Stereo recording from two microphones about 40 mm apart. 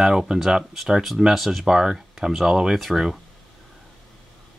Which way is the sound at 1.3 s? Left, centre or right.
Centre.